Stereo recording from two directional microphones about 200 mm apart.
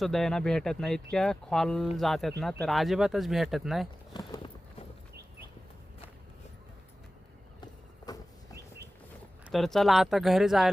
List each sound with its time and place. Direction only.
0.0 s speech: centre (ahead or behind)
4.1 s a sound: 20° left (ahead or behind)
9.5 s speech: centre (ahead or behind)